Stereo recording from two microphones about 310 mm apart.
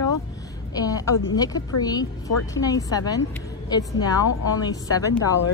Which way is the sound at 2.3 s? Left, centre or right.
Left.